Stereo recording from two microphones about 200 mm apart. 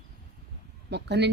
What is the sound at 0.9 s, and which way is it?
Speech, 60° right (ahead or behind).